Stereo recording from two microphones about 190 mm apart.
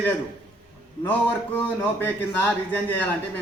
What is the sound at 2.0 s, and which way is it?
A man's voice, 10° left (ahead or behind).